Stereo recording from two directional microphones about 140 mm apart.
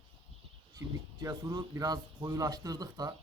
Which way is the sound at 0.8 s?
25° right (ahead or behind).